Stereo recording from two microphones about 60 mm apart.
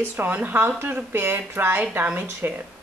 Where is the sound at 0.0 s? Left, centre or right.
Right.